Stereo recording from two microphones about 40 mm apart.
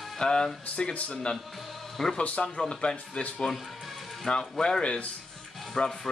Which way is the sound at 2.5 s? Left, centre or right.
Left.